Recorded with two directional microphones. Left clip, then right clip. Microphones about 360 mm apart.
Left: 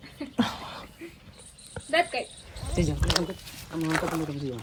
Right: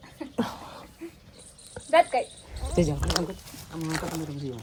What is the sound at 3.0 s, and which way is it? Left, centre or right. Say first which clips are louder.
Speech: left 1 dB; centre.